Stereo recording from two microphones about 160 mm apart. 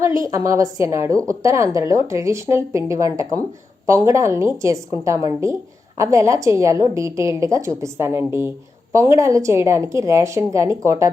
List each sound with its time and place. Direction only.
0.3 s a woman's voice: 20° right (ahead or behind)